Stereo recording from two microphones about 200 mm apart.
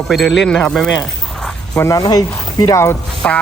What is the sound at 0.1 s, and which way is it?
Speech, centre (ahead or behind).